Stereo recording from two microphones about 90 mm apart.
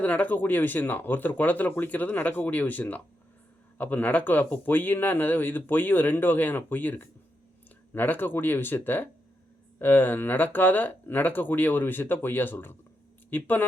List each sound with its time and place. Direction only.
0.0 s speech: 15° left (ahead or behind)